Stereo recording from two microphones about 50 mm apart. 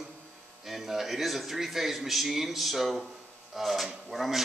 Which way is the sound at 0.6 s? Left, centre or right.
Centre.